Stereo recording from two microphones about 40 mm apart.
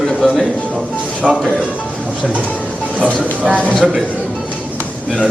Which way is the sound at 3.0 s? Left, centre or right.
Right.